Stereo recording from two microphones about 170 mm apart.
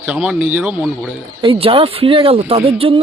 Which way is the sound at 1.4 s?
35° right (ahead or behind).